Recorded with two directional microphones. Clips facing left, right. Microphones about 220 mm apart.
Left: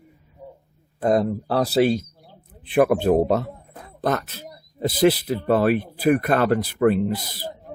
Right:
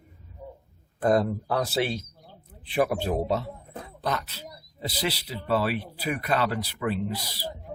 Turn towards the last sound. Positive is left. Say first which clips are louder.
# left 6 dB
turn(degrees=50)  # may be behind; listen again after turning